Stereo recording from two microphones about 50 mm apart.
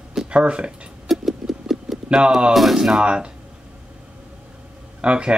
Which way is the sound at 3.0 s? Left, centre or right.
Right.